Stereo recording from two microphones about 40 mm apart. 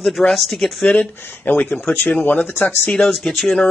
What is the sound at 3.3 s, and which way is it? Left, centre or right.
Speech, centre.